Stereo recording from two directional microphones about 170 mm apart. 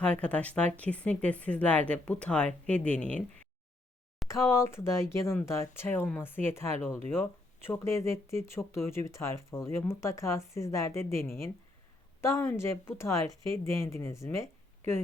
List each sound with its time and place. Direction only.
0.0 s speech: 5° left (ahead or behind)
4.3 s speech: 15° left (ahead or behind)